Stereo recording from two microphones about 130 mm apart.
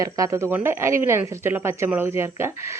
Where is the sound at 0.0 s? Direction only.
25° right (ahead or behind).